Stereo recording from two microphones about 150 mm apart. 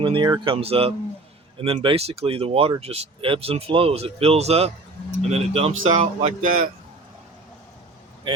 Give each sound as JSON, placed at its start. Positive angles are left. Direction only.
{"t": 0.0, "sound": "speech", "side_deg": -30}
{"t": 6.4, "sound": "a man's voice", "side_deg": -70}